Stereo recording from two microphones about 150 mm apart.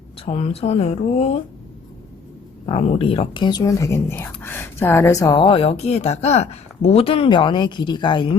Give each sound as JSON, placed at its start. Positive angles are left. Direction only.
{"t": 0.2, "sound": "speech", "side_deg": 45}
{"t": 2.6, "sound": "speech", "side_deg": 40}